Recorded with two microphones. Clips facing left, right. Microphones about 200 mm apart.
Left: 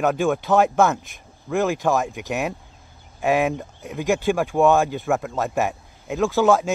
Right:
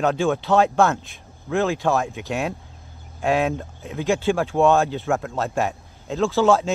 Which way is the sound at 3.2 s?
15° left (ahead or behind).